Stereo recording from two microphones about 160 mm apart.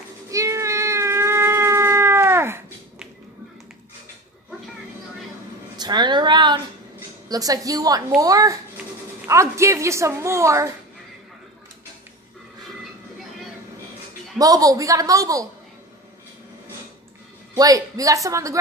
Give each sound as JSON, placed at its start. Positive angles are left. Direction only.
{"t": 0.3, "sound": "cat", "side_deg": -20}
{"t": 5.8, "sound": "a sound", "side_deg": -25}
{"t": 7.2, "sound": "a woman's voice", "side_deg": -25}
{"t": 14.4, "sound": "a woman's voice", "side_deg": -20}
{"t": 17.6, "sound": "a woman's voice", "side_deg": -20}